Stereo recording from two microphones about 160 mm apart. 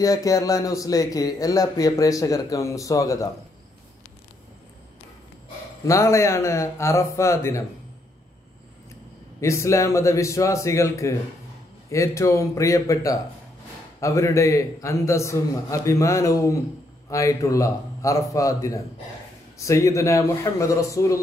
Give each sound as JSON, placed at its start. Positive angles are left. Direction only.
{"t": 0.0, "sound": "speech", "side_deg": 20}
{"t": 5.9, "sound": "speech", "side_deg": 20}
{"t": 9.4, "sound": "speech", "side_deg": 20}